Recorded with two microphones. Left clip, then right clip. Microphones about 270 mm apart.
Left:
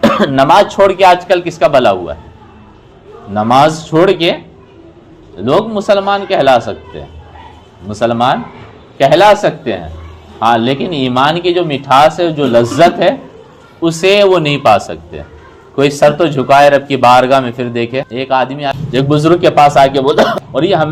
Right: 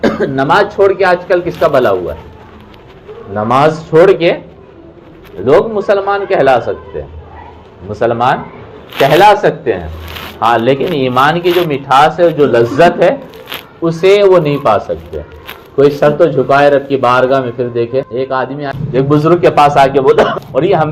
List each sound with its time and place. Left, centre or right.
0.3 s a man's voice: left
3.3 s a man's voice: left
5.5 s a man's voice: left
7.9 s a man's voice: left